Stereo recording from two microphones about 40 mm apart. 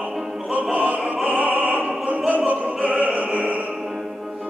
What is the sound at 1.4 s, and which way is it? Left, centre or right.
Opera, right.